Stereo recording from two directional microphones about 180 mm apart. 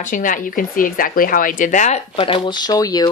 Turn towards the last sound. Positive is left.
turn(degrees=20)  # may be behind; listen again after turning